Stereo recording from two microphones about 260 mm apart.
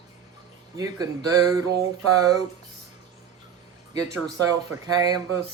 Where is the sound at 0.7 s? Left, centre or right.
Centre.